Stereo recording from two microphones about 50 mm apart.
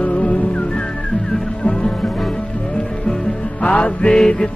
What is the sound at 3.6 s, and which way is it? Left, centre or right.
Music, left.